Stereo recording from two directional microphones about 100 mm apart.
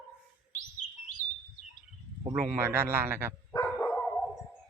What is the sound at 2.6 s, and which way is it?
Speech, 25° right (ahead or behind).